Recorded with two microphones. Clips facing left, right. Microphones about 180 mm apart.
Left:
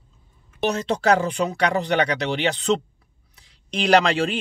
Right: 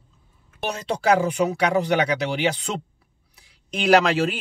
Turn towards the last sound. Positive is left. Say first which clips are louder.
# even
turn(degrees=-5)  # may be behind; listen again after turning